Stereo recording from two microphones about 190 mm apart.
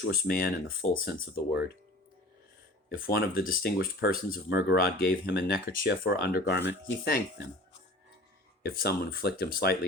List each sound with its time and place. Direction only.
0.1 s speech: 50° left (ahead or behind)
3.1 s speech: 50° left (ahead or behind)
8.6 s speech: 55° left (ahead or behind)